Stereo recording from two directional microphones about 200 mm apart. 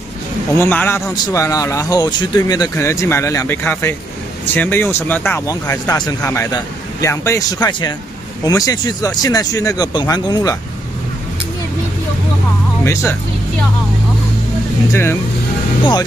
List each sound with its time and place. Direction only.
0.6 s a man's voice: 10° left (ahead or behind)
12.8 s speech: 15° left (ahead or behind)
14.9 s a man's voice: 10° left (ahead or behind)